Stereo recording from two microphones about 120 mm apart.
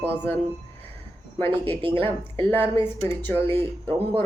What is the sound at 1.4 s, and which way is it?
Speech, 15° left (ahead or behind).